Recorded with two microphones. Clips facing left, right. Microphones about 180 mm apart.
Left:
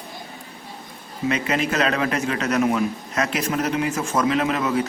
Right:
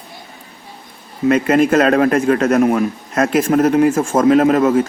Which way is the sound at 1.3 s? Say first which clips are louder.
Right 11 dB; 50° right (ahead or behind).